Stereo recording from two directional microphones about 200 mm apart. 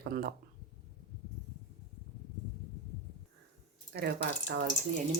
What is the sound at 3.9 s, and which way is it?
Speech, 55° right (ahead or behind).